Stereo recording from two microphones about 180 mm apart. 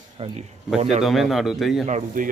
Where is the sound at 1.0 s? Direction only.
Centre (ahead or behind).